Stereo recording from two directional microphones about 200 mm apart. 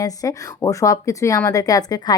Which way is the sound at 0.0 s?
15° left (ahead or behind).